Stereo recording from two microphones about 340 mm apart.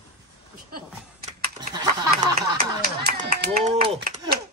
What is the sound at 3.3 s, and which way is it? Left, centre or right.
Speech, right.